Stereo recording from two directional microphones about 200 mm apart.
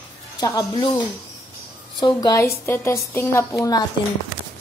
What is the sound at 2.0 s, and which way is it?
Speech, 20° left (ahead or behind).